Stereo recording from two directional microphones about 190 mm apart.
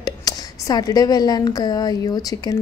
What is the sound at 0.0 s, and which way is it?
A woman's voice, 20° left (ahead or behind).